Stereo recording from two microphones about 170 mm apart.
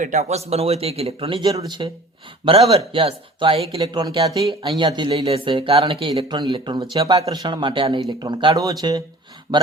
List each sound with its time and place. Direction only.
0.0 s a man's voice: 40° right (ahead or behind); by 9.6 s 25° right (ahead or behind)